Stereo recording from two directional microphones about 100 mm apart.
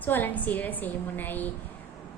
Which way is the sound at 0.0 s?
20° left (ahead or behind).